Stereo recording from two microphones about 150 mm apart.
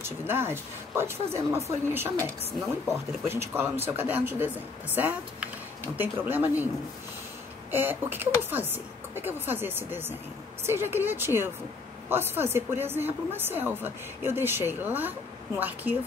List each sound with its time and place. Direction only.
0.0 s a woman's voice: 15° right (ahead or behind)
3.3 s a woman's voice: 15° right (ahead or behind)
7.7 s a woman's voice: 15° right (ahead or behind)